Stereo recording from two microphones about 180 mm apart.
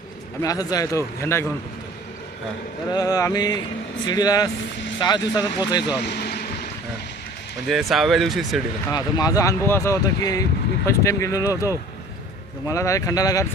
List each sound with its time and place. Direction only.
0.4 s speech: 20° left (ahead or behind)
2.9 s speech: 20° left (ahead or behind)
6.0 s vehicle: 65° left (ahead or behind)
7.7 s speech: centre (ahead or behind)
8.9 s speech: 20° left (ahead or behind)